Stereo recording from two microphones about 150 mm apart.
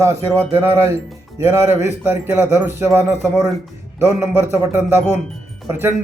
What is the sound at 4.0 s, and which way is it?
A man's voice, 15° right (ahead or behind).